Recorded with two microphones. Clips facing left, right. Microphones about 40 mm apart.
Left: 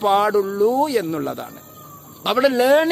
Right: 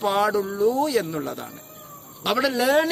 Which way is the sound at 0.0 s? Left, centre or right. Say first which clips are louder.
Left 5 dB; centre.